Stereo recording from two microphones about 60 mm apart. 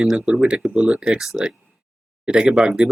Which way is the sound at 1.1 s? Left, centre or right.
Centre.